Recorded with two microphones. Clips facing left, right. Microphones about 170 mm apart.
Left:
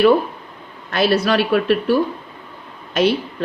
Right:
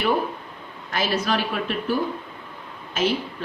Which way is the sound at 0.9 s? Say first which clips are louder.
Left 7 dB; 70° left (ahead or behind).